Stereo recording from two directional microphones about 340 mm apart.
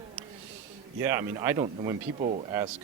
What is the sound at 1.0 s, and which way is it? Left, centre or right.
Speech, centre.